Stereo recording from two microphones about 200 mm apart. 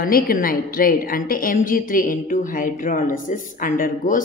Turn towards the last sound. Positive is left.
turn(degrees=40)  # may be behind; listen again after turning